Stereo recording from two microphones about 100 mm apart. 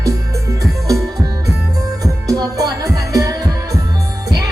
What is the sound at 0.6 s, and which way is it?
Music, 35° right (ahead or behind).